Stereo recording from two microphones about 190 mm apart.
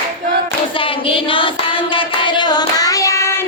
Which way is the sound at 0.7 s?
25° left (ahead or behind).